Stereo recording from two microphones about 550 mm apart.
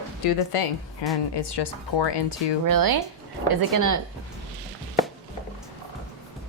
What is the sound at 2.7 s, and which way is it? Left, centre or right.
Speech, right.